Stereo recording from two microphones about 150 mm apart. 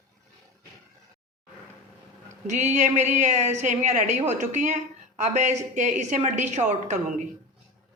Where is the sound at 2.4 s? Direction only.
55° right (ahead or behind).